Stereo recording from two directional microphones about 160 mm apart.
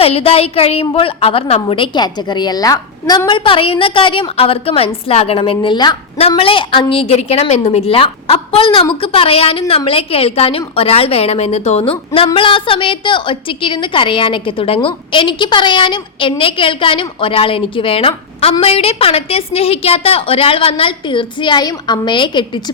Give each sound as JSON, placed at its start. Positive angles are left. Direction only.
{"t": 0.0, "sound": "a woman's voice", "side_deg": 40}